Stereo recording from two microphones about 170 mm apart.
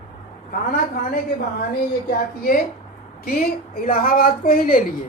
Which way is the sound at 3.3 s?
60° left (ahead or behind).